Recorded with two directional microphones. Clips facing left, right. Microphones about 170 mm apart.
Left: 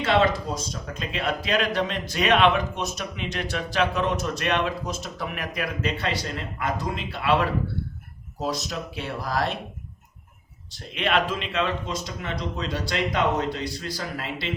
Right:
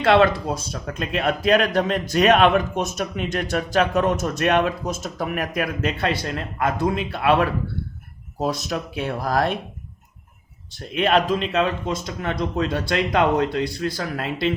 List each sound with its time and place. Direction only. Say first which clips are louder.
0.0 s speech: right 5 dB; 65° right (ahead or behind)
10.9 s speech: right 5 dB; 40° right (ahead or behind)